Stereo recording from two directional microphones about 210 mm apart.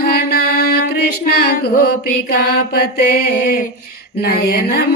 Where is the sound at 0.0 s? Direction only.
45° left (ahead or behind).